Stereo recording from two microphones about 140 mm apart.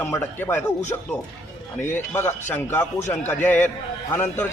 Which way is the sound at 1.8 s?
15° left (ahead or behind).